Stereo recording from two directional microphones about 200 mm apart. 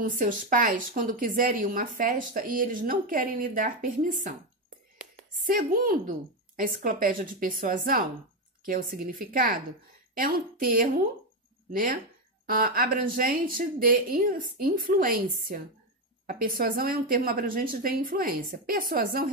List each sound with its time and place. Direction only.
0.0 s speech: 45° right (ahead or behind)
5.5 s speech: 45° right (ahead or behind)